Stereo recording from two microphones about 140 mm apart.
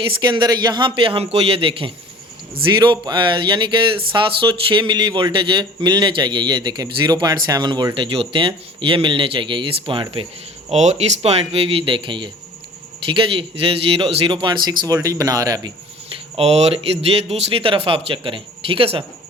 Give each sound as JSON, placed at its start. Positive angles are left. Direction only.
{"t": 0.0, "sound": "speech", "side_deg": -30}
{"t": 10.7, "sound": "speech", "side_deg": -50}
{"t": 16.4, "sound": "speech", "side_deg": -45}